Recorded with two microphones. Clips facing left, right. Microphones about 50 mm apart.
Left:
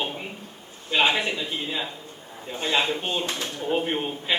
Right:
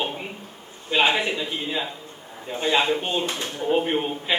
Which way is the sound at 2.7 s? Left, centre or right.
Centre.